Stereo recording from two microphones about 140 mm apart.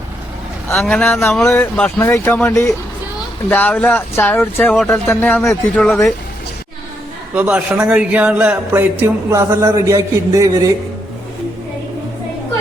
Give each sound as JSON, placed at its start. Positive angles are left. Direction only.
{"t": 0.7, "sound": "speech", "side_deg": 5}
{"t": 5.8, "sound": "speech", "side_deg": 5}
{"t": 7.3, "sound": "a man's voice", "side_deg": -10}